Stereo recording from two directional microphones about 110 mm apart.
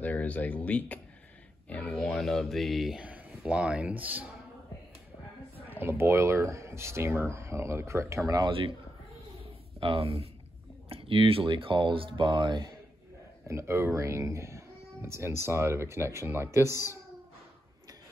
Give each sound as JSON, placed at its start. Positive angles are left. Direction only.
{"t": 0.0, "sound": "speech", "side_deg": 15}
{"t": 2.0, "sound": "speech", "side_deg": 5}
{"t": 5.7, "sound": "speech", "side_deg": -20}
{"t": 8.4, "sound": "speech", "side_deg": -55}
{"t": 9.4, "sound": "a sound", "side_deg": -55}
{"t": 10.9, "sound": "speech", "side_deg": -55}
{"t": 13.5, "sound": "speech", "side_deg": -25}